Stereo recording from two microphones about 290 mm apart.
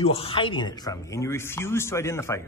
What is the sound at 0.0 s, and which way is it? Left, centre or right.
Speech, centre.